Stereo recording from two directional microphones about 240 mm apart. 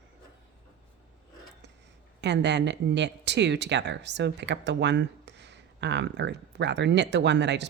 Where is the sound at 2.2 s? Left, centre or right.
Right.